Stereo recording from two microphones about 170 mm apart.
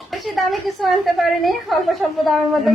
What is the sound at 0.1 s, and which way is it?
Speech, centre (ahead or behind).